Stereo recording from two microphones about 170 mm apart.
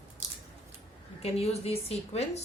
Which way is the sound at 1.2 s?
35° left (ahead or behind).